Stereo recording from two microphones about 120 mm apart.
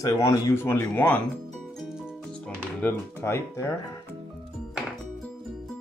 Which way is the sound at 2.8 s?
20° left (ahead or behind).